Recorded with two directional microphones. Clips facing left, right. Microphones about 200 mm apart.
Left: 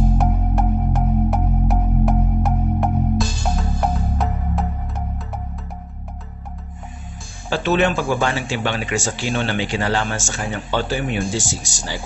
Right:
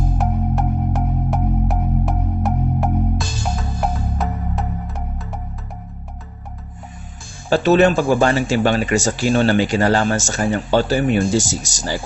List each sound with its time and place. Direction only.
0.2 s music: centre (ahead or behind)
7.4 s speech: 40° right (ahead or behind)